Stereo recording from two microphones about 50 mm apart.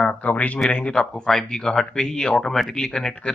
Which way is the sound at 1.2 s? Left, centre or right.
Centre.